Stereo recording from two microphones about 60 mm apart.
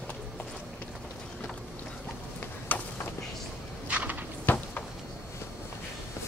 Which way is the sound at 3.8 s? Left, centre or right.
Right.